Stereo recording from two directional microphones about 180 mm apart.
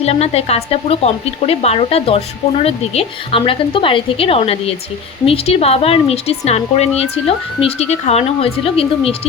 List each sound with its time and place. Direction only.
0.0 s speech: 35° left (ahead or behind)